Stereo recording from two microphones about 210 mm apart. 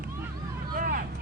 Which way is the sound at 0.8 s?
40° right (ahead or behind).